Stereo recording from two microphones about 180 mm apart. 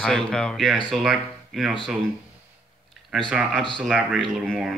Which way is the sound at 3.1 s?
5° right (ahead or behind).